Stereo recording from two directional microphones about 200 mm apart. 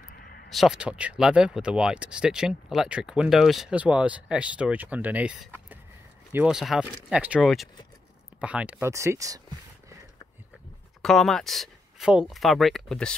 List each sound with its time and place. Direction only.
0.1 s a sound: 45° left (ahead or behind)
0.5 s speech: centre (ahead or behind)
11.0 s speech: centre (ahead or behind)